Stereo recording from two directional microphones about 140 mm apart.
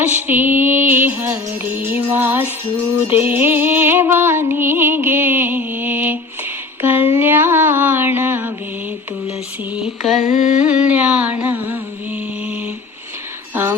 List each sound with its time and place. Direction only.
0.0 s music: 15° right (ahead or behind)
7.2 s music: 15° right (ahead or behind)
9.7 s mantra: centre (ahead or behind)
10.2 s carnatic music: 65° left (ahead or behind)
10.7 s music: 10° right (ahead or behind)
13.5 s music: 15° right (ahead or behind)